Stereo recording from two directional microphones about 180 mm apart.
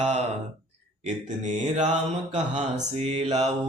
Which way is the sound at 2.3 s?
40° right (ahead or behind).